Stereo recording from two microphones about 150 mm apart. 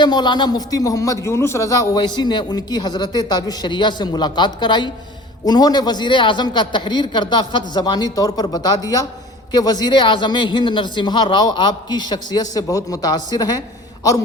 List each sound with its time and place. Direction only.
0.0 s a man's voice: 30° left (ahead or behind)